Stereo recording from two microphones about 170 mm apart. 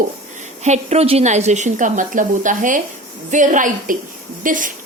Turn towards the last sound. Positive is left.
turn(degrees=-50)  # may be behind; listen again after turning